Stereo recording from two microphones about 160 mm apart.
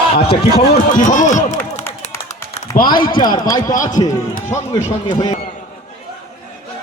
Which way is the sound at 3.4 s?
20° left (ahead or behind).